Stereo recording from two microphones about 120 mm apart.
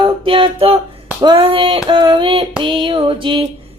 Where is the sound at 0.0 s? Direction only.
45° right (ahead or behind).